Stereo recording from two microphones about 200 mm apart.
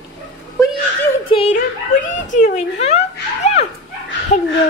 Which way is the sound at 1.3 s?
30° left (ahead or behind).